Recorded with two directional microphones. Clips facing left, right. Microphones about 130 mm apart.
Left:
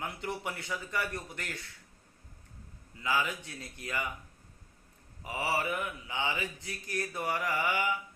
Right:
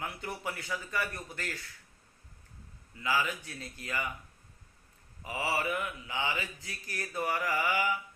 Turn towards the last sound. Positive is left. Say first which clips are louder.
# right 1 dB
turn(degrees=20)  # may be behind; listen again after turning